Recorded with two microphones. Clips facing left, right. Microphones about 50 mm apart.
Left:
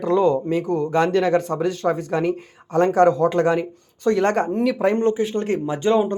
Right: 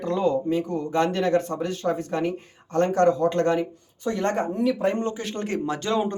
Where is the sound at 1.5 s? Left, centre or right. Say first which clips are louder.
Left 5 dB; left.